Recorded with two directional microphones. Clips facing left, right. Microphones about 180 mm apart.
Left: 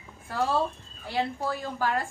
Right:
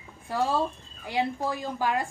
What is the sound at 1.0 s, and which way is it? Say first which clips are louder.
A woman's voice: right 1 dB; 15° right (ahead or behind).